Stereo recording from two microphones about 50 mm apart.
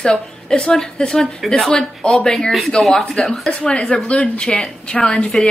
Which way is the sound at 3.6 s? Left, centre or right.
Centre.